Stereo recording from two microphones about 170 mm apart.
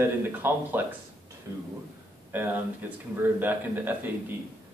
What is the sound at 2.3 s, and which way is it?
A man's voice, 10° right (ahead or behind).